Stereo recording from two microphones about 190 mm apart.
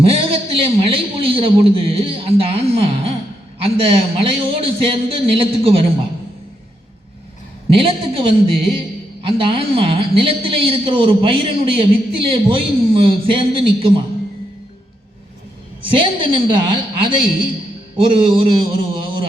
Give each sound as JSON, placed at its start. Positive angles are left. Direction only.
{"t": 0.0, "sound": "a woman's voice", "side_deg": -30}
{"t": 7.7, "sound": "a woman's voice", "side_deg": -30}
{"t": 15.9, "sound": "a woman's voice", "side_deg": -25}